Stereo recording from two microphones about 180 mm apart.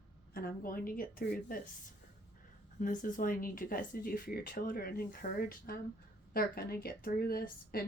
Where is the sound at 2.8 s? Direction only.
50° left (ahead or behind).